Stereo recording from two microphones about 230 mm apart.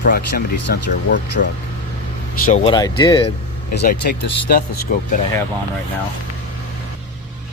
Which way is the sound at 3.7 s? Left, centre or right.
Left.